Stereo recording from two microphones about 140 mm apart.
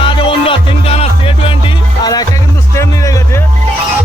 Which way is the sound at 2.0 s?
25° left (ahead or behind).